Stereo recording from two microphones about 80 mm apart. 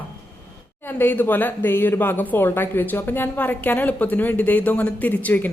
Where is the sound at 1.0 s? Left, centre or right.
Left.